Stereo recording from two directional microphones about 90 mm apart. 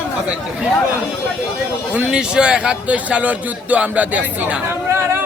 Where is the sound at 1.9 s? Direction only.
10° right (ahead or behind).